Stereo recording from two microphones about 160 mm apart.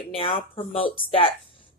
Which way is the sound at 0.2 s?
35° left (ahead or behind).